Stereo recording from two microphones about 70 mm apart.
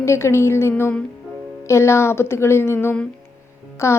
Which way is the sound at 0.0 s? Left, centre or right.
Left.